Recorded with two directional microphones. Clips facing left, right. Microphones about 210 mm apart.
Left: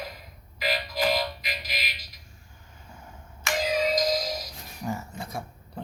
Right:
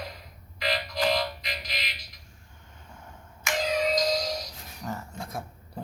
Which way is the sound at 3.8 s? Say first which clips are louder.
Even; 5° left (ahead or behind).